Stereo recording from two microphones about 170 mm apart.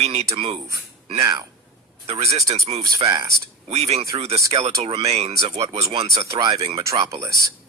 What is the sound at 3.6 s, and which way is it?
Speech, 40° right (ahead or behind).